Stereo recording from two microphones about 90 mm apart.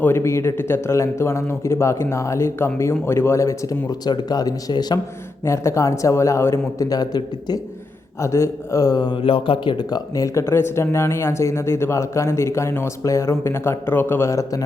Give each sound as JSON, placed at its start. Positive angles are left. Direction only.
{"t": 0.0, "sound": "speech", "side_deg": 30}
{"t": 5.5, "sound": "speech", "side_deg": 35}
{"t": 8.2, "sound": "speech", "side_deg": 35}
{"t": 9.2, "sound": "speech", "side_deg": 75}